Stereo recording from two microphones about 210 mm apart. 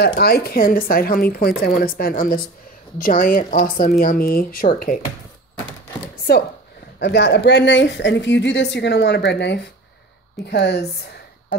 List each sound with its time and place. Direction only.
0.0 s speech: 50° left (ahead or behind)
6.3 s a woman's voice: 45° left (ahead or behind)